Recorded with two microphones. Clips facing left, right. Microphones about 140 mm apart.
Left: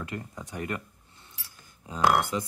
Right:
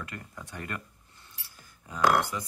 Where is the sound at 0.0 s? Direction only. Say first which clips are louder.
Left 5 dB; 20° left (ahead or behind).